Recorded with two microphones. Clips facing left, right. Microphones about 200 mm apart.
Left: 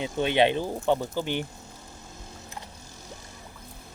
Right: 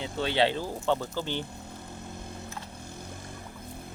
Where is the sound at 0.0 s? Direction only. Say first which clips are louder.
Left 4 dB; 20° left (ahead or behind).